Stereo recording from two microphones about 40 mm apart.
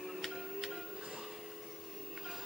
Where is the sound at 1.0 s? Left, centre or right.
Centre.